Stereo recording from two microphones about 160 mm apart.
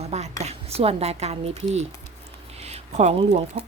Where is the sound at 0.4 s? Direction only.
40° right (ahead or behind).